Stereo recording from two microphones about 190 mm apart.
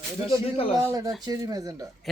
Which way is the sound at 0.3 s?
30° left (ahead or behind).